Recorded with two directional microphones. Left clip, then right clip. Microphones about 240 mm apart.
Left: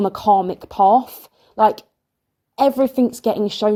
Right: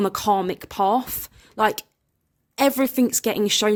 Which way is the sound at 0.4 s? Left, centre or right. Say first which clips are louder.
Left 6 dB; centre.